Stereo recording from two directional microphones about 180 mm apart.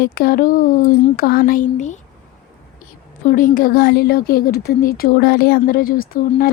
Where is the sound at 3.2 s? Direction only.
50° left (ahead or behind).